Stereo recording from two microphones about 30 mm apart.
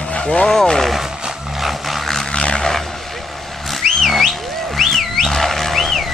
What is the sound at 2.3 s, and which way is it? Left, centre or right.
Vehicle, left.